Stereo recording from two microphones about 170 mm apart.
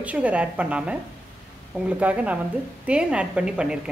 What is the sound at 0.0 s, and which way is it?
Speech, 10° right (ahead or behind).